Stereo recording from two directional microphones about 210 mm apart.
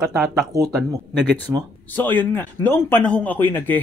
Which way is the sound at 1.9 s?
10° left (ahead or behind).